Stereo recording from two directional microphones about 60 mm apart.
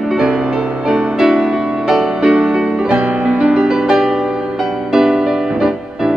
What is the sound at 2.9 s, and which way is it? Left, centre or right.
Music, right.